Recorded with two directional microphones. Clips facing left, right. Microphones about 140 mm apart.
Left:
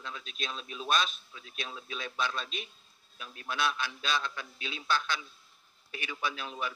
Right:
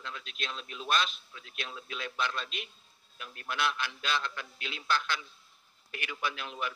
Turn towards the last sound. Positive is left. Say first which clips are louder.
# even
turn(degrees=15)  # may be behind; listen again after turning